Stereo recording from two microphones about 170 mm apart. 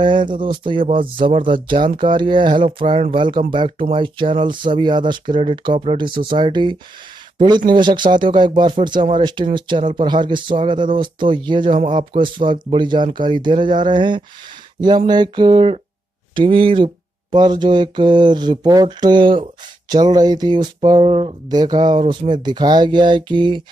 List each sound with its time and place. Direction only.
0.0 s speech: 30° right (ahead or behind)